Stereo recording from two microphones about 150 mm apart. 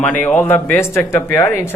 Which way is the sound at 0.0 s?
10° left (ahead or behind).